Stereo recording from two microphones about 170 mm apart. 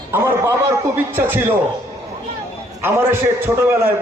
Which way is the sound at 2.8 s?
15° right (ahead or behind).